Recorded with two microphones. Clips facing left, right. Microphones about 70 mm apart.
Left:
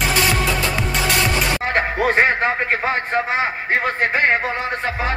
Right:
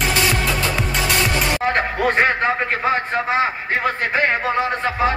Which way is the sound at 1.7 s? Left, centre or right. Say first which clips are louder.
Left 1 dB; left.